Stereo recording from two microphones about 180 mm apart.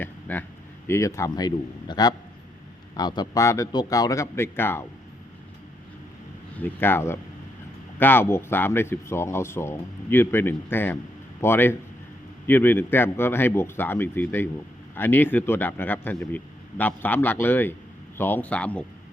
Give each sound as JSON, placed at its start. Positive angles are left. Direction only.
{"t": 0.0, "sound": "a sound", "side_deg": 10}
{"t": 0.9, "sound": "a man's voice", "side_deg": 15}
{"t": 6.6, "sound": "speech", "side_deg": 10}